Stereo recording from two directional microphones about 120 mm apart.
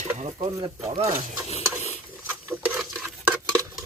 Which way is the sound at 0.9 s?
60° right (ahead or behind).